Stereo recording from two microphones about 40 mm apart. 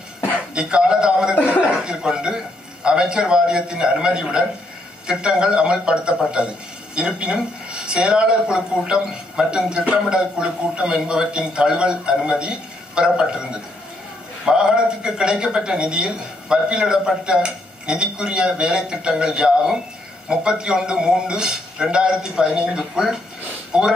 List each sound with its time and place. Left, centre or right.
0.6 s a man's voice: right